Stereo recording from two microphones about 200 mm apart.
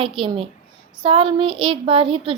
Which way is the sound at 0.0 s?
25° right (ahead or behind).